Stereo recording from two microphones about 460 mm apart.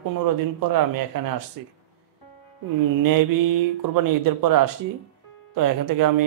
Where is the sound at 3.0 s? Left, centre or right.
Right.